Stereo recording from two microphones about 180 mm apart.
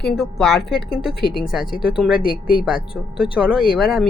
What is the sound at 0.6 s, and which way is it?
Speech, 60° left (ahead or behind).